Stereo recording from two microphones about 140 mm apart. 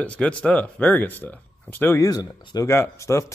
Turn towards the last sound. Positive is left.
turn(degrees=20)  # may be behind; listen again after turning